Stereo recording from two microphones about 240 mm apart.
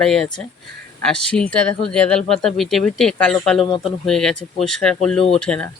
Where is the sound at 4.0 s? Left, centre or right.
Centre.